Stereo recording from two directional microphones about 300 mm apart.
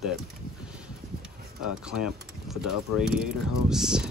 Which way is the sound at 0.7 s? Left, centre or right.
Centre.